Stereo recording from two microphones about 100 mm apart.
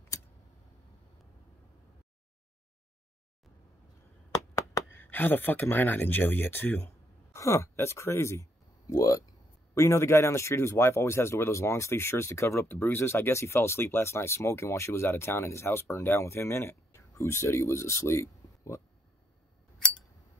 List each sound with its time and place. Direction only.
0.1 s tick: 35° left (ahead or behind)
4.6 s a sound: 30° left (ahead or behind)
5.0 s speech: 20° left (ahead or behind)